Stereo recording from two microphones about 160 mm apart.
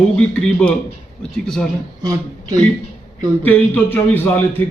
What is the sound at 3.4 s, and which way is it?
Speech, 10° left (ahead or behind).